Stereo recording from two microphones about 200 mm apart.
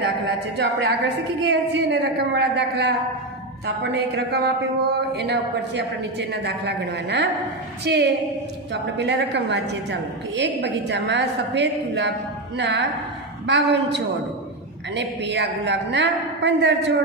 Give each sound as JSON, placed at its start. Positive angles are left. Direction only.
{"t": 0.6, "sound": "speech", "side_deg": -55}